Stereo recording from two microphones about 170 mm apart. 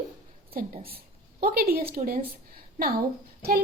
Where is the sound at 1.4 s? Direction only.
60° right (ahead or behind).